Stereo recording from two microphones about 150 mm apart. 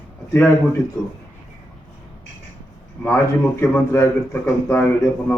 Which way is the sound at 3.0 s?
15° left (ahead or behind).